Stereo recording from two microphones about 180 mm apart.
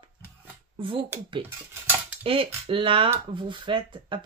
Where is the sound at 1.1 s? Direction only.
10° right (ahead or behind).